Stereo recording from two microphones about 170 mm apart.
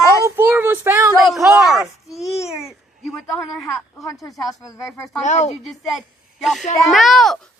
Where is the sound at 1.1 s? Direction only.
Centre (ahead or behind).